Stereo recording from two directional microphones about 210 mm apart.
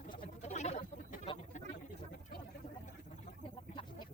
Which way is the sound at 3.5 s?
20° left (ahead or behind).